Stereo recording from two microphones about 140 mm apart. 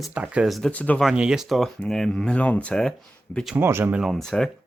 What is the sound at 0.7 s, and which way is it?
Speech, 10° left (ahead or behind).